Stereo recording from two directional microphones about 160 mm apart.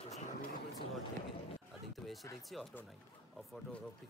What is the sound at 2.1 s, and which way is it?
Speech, centre (ahead or behind).